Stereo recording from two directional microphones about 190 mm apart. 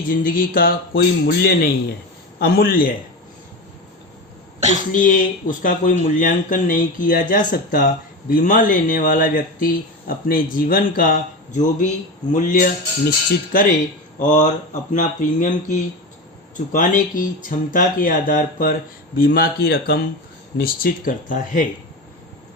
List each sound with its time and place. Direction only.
0.2 s speech: 45° left (ahead or behind)
4.9 s speech: 45° left (ahead or behind)
14.2 s speech: 40° left (ahead or behind)